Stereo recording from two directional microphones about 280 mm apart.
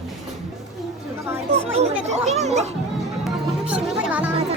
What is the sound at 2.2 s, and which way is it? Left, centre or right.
Speech, right.